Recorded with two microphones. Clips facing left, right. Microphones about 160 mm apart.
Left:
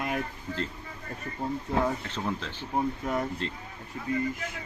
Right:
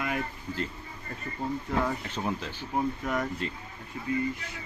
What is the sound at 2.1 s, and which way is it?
Speech, 10° right (ahead or behind).